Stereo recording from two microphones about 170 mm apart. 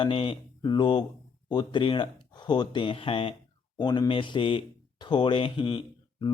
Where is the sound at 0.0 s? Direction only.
30° left (ahead or behind).